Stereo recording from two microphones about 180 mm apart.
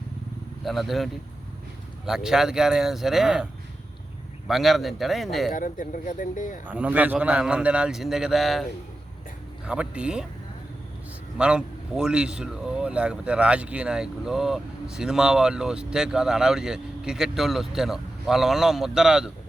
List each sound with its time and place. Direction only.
0.6 s a man's voice: centre (ahead or behind)
4.4 s a man's voice: centre (ahead or behind)
5.5 s speech: 50° left (ahead or behind)
6.7 s a man's voice: 10° right (ahead or behind)
9.6 s speech: 5° right (ahead or behind)
11.3 s a man's voice: 5° right (ahead or behind)